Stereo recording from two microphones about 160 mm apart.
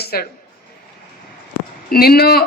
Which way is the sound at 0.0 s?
75° left (ahead or behind).